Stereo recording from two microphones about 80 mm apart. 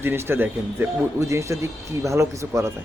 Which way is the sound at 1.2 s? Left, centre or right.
Right.